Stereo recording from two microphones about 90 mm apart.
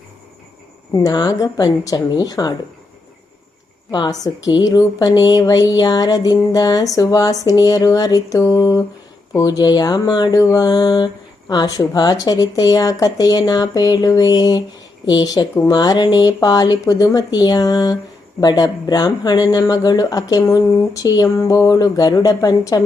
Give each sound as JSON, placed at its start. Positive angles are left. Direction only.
{"t": 0.9, "sound": "speech", "side_deg": 45}
{"t": 3.9, "sound": "speech", "side_deg": 45}